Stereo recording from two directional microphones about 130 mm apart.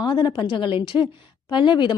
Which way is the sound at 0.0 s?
35° left (ahead or behind).